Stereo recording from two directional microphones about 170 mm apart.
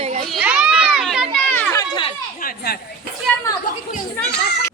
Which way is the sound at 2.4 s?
60° left (ahead or behind).